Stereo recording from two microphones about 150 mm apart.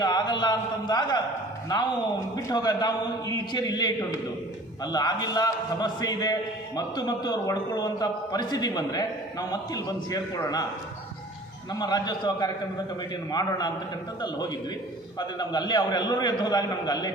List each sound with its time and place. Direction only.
0.0 s a man's voice: 30° left (ahead or behind)
2.3 s a man's voice: 25° left (ahead or behind)
11.7 s a man's voice: 25° left (ahead or behind)
15.4 s a man's voice: 30° left (ahead or behind)